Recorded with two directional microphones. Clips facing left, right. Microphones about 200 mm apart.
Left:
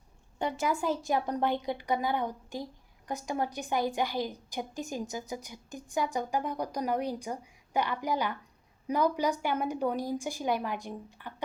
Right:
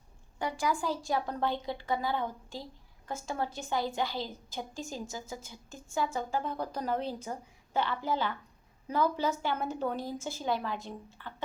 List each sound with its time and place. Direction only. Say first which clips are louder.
0.3 s a woman's voice: left 2 dB; 25° left (ahead or behind)